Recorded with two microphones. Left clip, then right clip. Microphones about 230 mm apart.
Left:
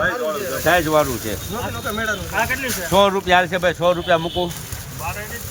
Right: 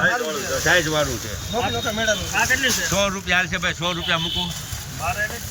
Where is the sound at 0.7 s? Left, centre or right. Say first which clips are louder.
Left 3 dB; left.